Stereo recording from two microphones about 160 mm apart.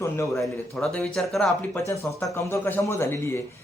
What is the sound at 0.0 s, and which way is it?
Speech, 20° left (ahead or behind).